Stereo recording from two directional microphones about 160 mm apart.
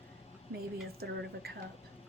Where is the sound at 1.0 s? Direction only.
80° right.